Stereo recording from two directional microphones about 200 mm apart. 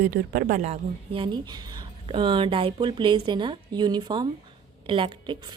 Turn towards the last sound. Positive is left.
turn(degrees=-25)  # may be behind; listen again after turning